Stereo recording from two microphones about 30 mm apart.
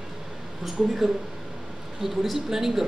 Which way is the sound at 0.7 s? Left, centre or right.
Centre.